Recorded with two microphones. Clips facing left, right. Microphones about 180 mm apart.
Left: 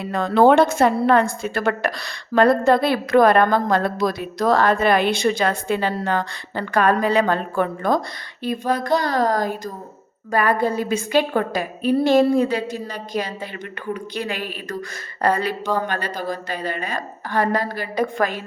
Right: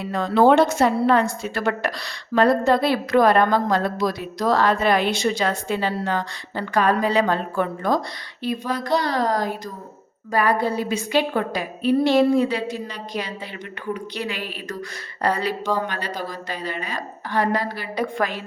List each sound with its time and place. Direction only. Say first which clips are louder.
0.1 s a woman's voice: left 1 dB; 55° left (ahead or behind)